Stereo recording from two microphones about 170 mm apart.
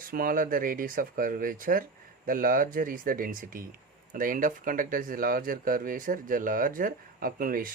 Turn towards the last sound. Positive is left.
turn(degrees=-55)  # may be behind; listen again after turning